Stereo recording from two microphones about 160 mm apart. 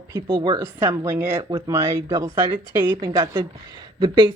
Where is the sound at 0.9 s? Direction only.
15° right (ahead or behind).